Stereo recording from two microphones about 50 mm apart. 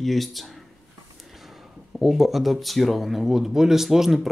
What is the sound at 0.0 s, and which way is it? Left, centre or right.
Speech, centre.